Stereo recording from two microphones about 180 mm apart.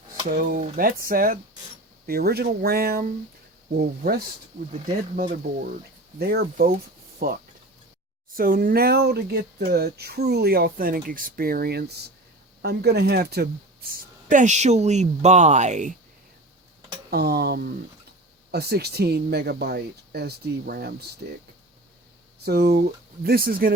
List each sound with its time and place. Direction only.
0.3 s speech: 50° right (ahead or behind)
6.1 s speech: 60° right (ahead or behind); by 16.0 s 40° right (ahead or behind)
17.1 s speech: 60° right (ahead or behind)
22.4 s speech: 60° right (ahead or behind)